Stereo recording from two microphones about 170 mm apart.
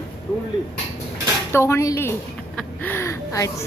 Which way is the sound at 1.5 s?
15° left (ahead or behind).